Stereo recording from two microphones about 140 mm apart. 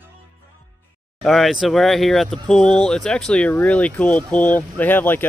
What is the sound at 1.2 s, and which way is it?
Speech, centre (ahead or behind).